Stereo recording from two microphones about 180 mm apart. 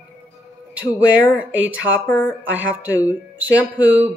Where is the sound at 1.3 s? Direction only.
10° right (ahead or behind).